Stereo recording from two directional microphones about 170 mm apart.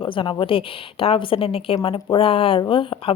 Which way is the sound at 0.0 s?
30° left (ahead or behind).